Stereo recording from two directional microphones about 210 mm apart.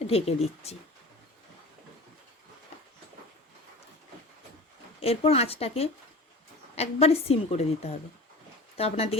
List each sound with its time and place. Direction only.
0.1 s a woman's voice: 30° left (ahead or behind)
4.9 s a woman's voice: 30° left (ahead or behind)